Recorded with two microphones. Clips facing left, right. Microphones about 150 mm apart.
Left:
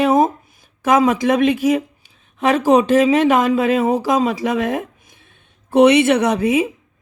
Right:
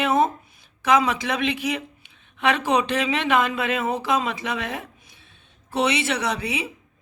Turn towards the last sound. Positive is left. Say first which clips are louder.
# left 11 dB
turn(degrees=50)  # may be behind; listen again after turning